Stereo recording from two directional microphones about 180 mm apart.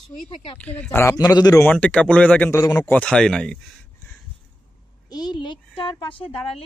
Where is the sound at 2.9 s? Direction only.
5° left (ahead or behind).